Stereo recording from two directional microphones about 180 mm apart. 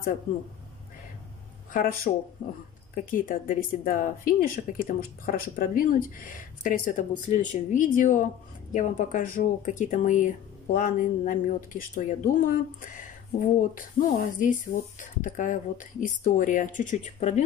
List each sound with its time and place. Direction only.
1.7 s speech: 50° left (ahead or behind)